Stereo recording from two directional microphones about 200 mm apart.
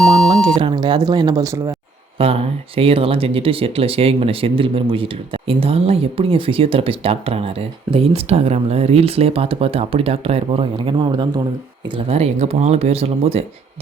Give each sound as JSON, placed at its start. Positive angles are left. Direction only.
{"t": 0.0, "sound": "beep", "side_deg": 5}
{"t": 0.6, "sound": "speech", "side_deg": -20}
{"t": 2.1, "sound": "speech", "side_deg": -30}